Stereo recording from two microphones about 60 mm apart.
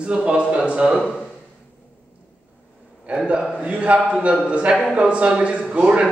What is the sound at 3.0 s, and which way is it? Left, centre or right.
A man's voice, right.